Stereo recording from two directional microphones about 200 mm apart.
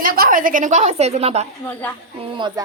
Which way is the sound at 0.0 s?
45° right (ahead or behind).